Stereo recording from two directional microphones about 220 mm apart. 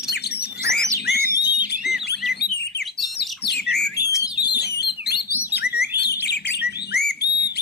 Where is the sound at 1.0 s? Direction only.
45° left (ahead or behind).